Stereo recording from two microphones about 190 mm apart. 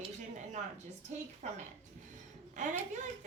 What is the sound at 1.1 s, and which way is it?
A woman's voice, 40° right (ahead or behind).